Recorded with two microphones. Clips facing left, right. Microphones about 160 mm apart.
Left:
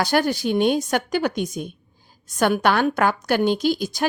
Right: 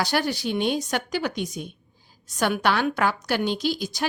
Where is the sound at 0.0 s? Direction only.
50° left (ahead or behind).